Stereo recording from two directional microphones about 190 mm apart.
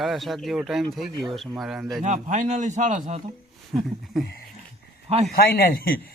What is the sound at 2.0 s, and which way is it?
A man's voice, 40° right (ahead or behind).